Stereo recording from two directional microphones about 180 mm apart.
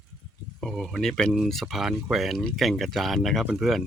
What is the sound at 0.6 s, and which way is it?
Speech, centre (ahead or behind).